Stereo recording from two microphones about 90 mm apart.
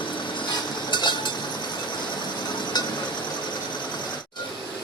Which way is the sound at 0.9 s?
55° left (ahead or behind).